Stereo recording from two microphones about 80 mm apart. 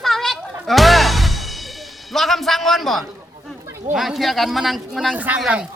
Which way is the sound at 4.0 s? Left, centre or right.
Centre.